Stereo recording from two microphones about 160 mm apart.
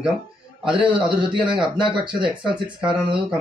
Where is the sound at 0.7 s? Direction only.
30° right (ahead or behind).